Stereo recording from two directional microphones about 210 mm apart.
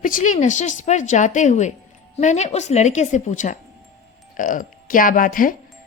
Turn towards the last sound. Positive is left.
turn(degrees=40)  # may be behind; listen again after turning